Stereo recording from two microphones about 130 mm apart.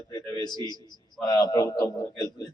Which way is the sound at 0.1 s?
30° left (ahead or behind).